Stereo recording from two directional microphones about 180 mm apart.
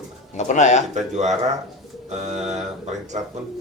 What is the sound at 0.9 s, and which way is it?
Speech, 40° right (ahead or behind).